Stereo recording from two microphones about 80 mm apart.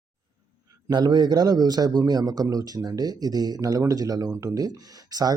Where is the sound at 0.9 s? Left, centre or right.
Right.